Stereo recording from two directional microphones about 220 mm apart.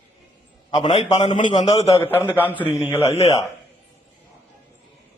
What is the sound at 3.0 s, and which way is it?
Speech, 30° left (ahead or behind).